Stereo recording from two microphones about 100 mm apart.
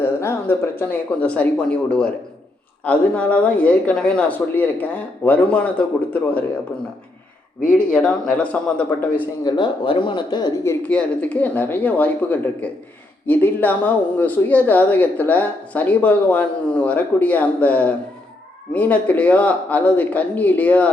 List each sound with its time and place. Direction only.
0.0 s speech: 25° left (ahead or behind)
7.7 s speech: 10° left (ahead or behind)
9.4 s speech: 50° left (ahead or behind)
10.8 s speech: 15° left (ahead or behind)